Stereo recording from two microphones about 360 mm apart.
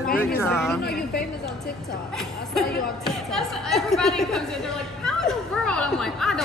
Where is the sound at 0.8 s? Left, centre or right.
Left.